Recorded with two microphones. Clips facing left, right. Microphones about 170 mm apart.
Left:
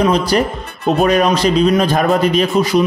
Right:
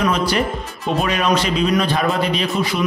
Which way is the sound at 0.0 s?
35° left (ahead or behind).